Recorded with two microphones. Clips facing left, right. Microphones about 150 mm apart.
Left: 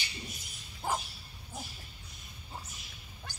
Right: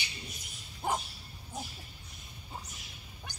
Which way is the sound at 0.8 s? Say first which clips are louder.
Right 1 dB; 20° right (ahead or behind).